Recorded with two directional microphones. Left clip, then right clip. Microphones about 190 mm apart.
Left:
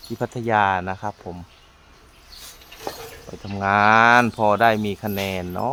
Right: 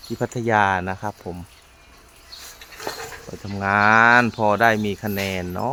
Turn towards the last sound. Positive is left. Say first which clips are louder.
# even
turn(degrees=-5)  # may be behind; listen again after turning